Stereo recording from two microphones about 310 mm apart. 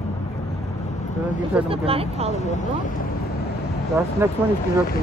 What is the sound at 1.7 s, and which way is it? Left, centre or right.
Speech, centre.